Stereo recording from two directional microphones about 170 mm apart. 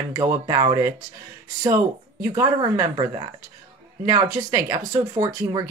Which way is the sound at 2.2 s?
20° right (ahead or behind).